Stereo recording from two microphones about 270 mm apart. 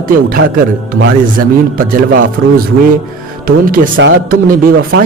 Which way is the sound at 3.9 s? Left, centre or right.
Right.